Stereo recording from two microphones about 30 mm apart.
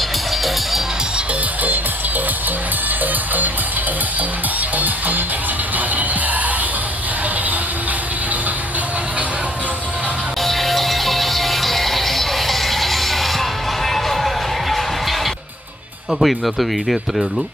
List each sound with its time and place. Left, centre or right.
4.8 s music: right
10.4 s music: centre
16.2 s speech: centre